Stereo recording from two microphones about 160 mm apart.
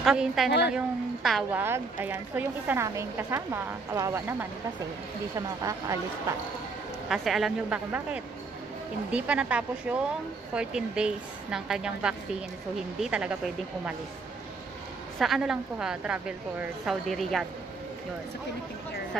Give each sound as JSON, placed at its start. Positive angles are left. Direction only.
{"t": 0.0, "sound": "speech", "side_deg": -5}
{"t": 0.5, "sound": "a woman's voice", "side_deg": 90}
{"t": 0.7, "sound": "speech", "side_deg": 0}
{"t": 1.5, "sound": "speech", "side_deg": -10}
{"t": 5.6, "sound": "speech", "side_deg": -20}
{"t": 7.1, "sound": "speech", "side_deg": 0}
{"t": 15.1, "sound": "speech", "side_deg": 0}